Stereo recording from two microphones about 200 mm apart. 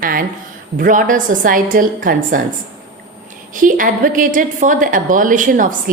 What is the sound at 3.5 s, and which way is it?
A woman's voice, 40° right (ahead or behind).